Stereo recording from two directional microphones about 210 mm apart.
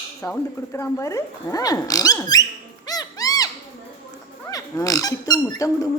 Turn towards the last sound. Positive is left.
turn(degrees=15)  # may be behind; listen again after turning